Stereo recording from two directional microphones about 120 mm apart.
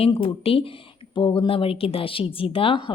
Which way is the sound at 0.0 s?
50° left (ahead or behind).